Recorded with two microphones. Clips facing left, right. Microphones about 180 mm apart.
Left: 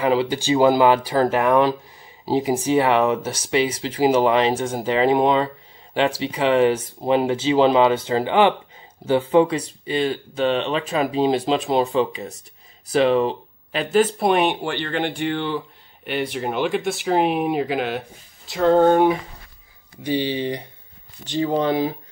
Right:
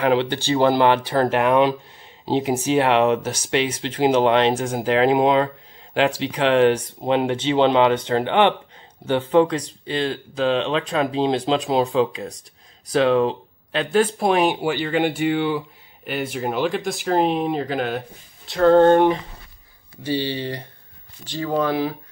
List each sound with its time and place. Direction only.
0.0 s speech: 5° left (ahead or behind)